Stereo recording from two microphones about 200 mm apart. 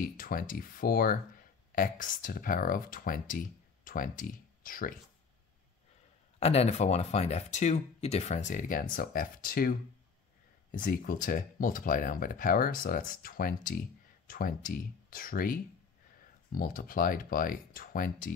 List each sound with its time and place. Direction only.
0.0 s speech: 45° left (ahead or behind)
6.4 s speech: 30° left (ahead or behind)